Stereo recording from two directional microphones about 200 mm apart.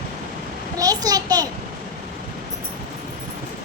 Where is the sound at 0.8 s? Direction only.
20° right (ahead or behind).